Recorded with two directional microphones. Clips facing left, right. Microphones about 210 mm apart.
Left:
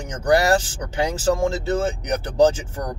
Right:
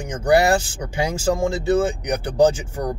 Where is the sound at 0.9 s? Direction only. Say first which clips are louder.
Even; 10° right (ahead or behind).